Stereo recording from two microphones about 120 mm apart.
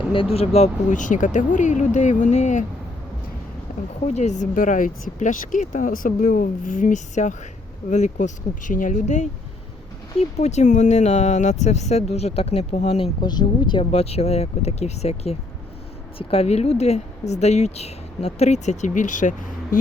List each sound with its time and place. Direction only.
0.1 s speech: 50° left (ahead or behind); by 2.6 s 75° left (ahead or behind)
4.0 s speech: 70° left (ahead or behind)
10.2 s speech: 70° left (ahead or behind)
13.2 s speech: 35° left (ahead or behind); by 19.3 s 90° left